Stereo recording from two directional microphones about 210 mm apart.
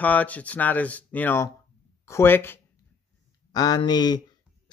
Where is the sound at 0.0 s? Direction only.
5° left (ahead or behind).